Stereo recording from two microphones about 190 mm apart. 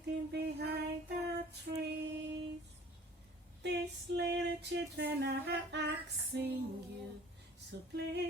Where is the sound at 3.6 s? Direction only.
60° right (ahead or behind).